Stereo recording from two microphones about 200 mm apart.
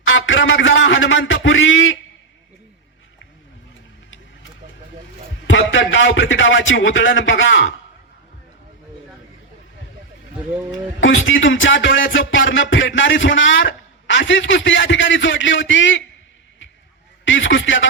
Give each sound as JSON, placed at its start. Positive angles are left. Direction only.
{"t": 0.0, "sound": "music", "side_deg": 75}
{"t": 5.5, "sound": "music", "side_deg": 70}
{"t": 11.0, "sound": "music", "side_deg": 75}
{"t": 17.2, "sound": "music", "side_deg": 70}